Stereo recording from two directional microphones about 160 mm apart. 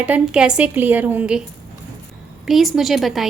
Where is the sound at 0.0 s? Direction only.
5° right (ahead or behind).